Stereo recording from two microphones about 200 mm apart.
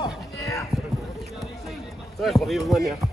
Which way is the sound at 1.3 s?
Centre (ahead or behind).